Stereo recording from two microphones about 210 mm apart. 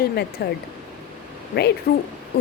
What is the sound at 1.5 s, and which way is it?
Speech, 55° left (ahead or behind).